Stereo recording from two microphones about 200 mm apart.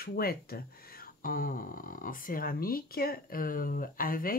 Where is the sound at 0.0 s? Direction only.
50° left (ahead or behind).